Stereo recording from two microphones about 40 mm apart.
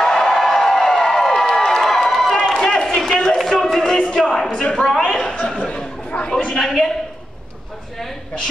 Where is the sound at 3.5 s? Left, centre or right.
Centre.